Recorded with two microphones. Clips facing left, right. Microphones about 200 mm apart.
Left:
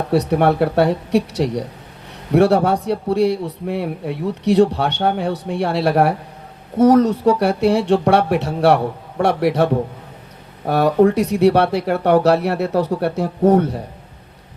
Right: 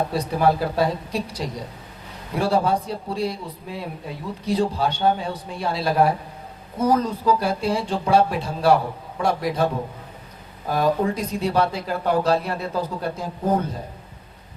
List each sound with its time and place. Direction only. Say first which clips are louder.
0.1 s a man's voice: left 5 dB; 70° left (ahead or behind)
10.7 s a man's voice: left 7 dB; 70° left (ahead or behind)